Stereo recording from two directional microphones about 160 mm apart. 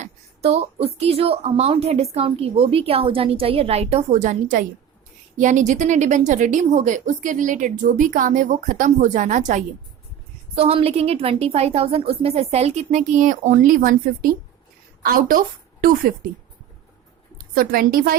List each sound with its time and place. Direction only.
0.0 s a woman's voice: 40° right (ahead or behind)
10.5 s a woman's voice: 35° right (ahead or behind); by 16.1 s 65° right (ahead or behind)
17.3 s a woman's voice: 65° right (ahead or behind)